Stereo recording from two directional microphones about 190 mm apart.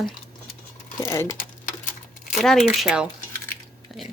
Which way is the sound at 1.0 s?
15° left (ahead or behind).